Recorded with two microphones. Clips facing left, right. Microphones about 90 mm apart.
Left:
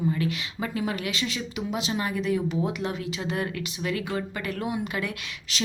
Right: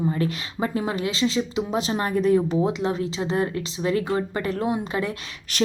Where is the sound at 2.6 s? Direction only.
30° right (ahead or behind).